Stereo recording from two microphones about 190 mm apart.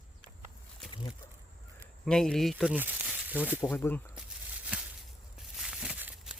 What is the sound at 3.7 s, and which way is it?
Speech, 10° left (ahead or behind).